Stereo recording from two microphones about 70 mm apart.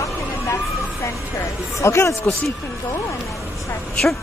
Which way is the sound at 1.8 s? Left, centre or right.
Left.